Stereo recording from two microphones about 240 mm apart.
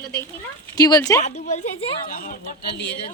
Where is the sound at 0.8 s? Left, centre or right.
Centre.